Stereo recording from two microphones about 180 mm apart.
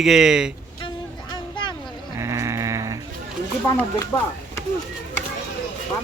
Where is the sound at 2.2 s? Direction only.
15° right (ahead or behind).